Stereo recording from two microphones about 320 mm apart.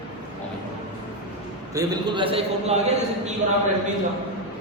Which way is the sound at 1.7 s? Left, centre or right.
Centre.